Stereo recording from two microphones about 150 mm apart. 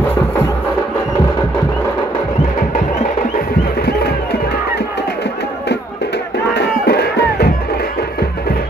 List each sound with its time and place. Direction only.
3.8 s crowd: 90° left
6.5 s music: 90° left